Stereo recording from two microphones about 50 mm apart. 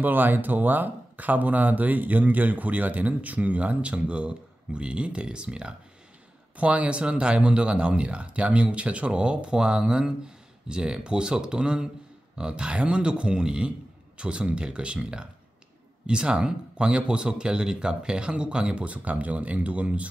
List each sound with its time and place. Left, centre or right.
0.0 s speech: right